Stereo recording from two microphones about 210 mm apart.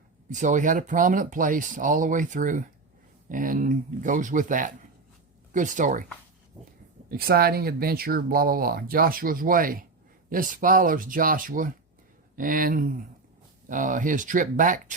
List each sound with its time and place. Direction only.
0.3 s speech: 35° right (ahead or behind)
7.1 s speech: 45° right (ahead or behind)